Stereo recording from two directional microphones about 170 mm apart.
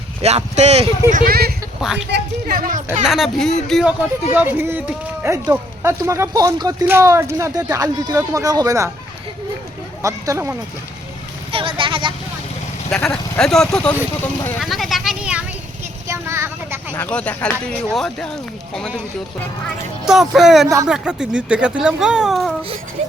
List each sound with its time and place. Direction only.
0.2 s speech: 40° right (ahead or behind)
1.1 s speech: 60° right (ahead or behind)
2.0 s a woman's voice: 90° right
2.6 s speech: 50° right (ahead or behind)
3.1 s speech: centre (ahead or behind)
4.3 s speech: 10° right (ahead or behind)
10.0 s speech: 20° right (ahead or behind)
11.5 s a sound: 30° right (ahead or behind)
12.9 s speech: 5° left (ahead or behind)
14.6 s a sound: centre (ahead or behind)
16.0 s a sound: 15° right (ahead or behind)
16.9 s speech: 5° left (ahead or behind)
20.1 s speech: centre (ahead or behind)
23.0 s speech: 40° right (ahead or behind)